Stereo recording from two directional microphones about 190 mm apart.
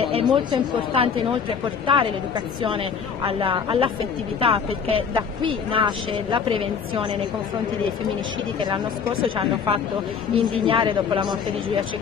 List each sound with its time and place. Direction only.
0.0 s speech: 25° right (ahead or behind)
8.6 s speech: 25° right (ahead or behind)